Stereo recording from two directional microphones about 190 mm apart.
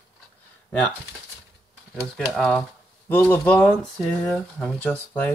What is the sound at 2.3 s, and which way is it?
Speech, 5° left (ahead or behind).